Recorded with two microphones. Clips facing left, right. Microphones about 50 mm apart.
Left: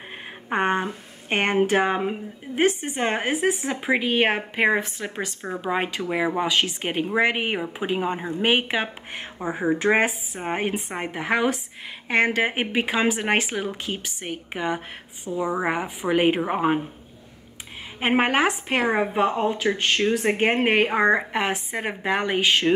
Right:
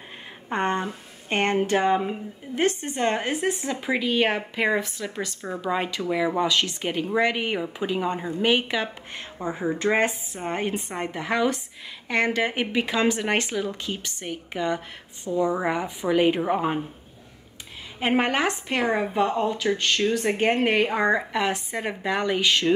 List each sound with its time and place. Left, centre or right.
0.5 s a woman's voice: centre
18.0 s a woman's voice: left